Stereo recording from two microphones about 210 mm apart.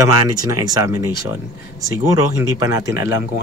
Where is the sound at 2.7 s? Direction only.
15° right (ahead or behind).